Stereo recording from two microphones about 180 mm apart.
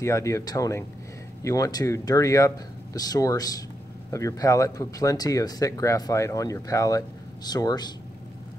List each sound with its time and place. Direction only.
0.0 s speech: 15° left (ahead or behind)